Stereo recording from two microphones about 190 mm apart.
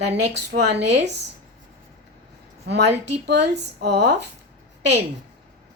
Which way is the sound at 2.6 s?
60° right (ahead or behind).